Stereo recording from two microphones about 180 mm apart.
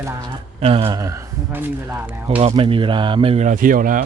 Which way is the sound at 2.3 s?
30° right (ahead or behind).